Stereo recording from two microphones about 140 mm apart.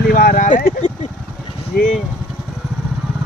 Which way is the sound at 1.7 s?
90° left.